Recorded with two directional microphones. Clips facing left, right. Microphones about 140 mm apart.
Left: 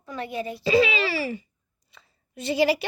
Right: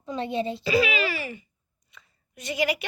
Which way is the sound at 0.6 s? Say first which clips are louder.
Left 5 dB; 30° left (ahead or behind).